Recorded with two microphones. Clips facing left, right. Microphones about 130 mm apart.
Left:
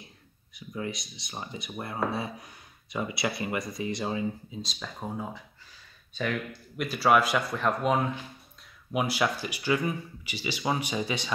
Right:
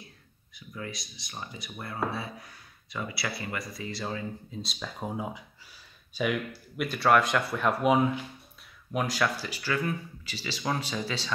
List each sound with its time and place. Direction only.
0.6 s speech: 25° left (ahead or behind)
4.5 s speech: centre (ahead or behind)
6.9 s speech: 5° left (ahead or behind)
8.9 s speech: 10° left (ahead or behind)